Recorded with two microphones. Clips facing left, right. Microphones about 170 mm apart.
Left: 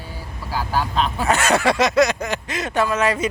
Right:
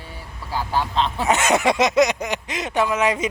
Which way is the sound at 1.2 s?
20° right (ahead or behind).